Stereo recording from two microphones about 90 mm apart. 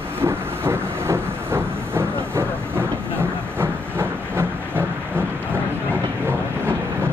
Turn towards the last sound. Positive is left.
turn(degrees=-25)  # may be behind; listen again after turning